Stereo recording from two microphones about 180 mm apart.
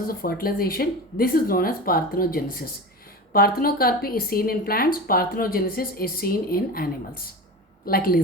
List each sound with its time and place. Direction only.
0.1 s speech: 55° left (ahead or behind)